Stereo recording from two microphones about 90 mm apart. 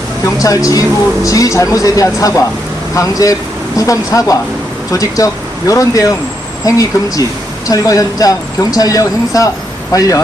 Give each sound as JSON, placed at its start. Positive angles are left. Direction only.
{"t": 0.3, "sound": "speech", "side_deg": 40}